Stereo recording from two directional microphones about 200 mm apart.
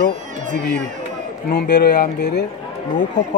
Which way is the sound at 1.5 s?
55° left (ahead or behind).